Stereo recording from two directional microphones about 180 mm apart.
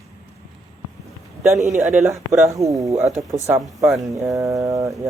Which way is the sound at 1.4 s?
15° right (ahead or behind).